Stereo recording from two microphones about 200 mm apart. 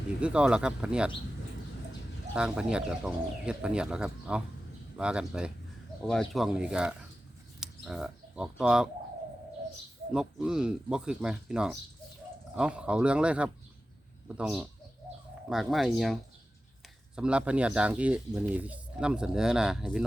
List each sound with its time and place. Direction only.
0.2 s speech: 5° right (ahead or behind)
2.3 s speech: 5° right (ahead or behind)
10.1 s speech: 5° right (ahead or behind)
17.2 s speech: 5° right (ahead or behind)